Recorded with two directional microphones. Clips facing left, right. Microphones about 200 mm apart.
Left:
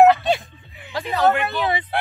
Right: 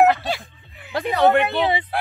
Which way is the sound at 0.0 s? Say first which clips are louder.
Left 3 dB; 20° left (ahead or behind).